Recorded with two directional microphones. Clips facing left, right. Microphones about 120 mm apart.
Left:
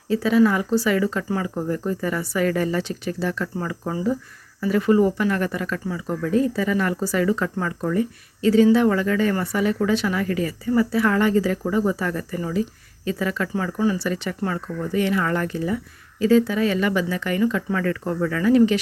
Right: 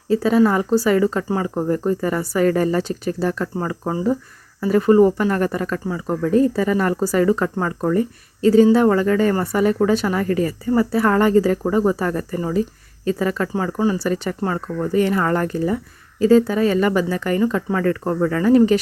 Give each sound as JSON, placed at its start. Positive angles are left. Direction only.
{"t": 0.1, "sound": "speech", "side_deg": -40}